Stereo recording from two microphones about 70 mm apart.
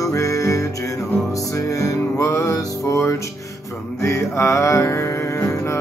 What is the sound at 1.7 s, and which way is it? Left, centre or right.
Music, left.